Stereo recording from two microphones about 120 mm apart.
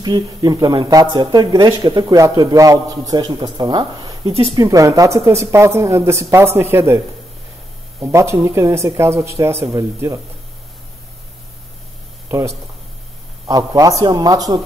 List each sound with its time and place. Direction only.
0.0 s a woman's voice: 35° right (ahead or behind)
8.0 s a woman's voice: 25° right (ahead or behind)
12.3 s speech: 25° right (ahead or behind)